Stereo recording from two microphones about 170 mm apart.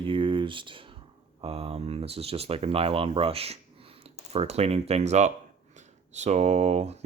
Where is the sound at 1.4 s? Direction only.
35° right (ahead or behind).